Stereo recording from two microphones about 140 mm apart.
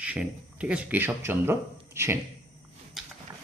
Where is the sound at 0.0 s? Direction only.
10° right (ahead or behind).